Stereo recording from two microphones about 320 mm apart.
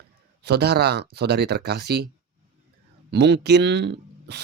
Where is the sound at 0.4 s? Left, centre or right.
Right.